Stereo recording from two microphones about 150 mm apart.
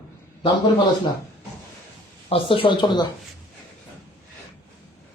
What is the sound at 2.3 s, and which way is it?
Speech, 35° left (ahead or behind).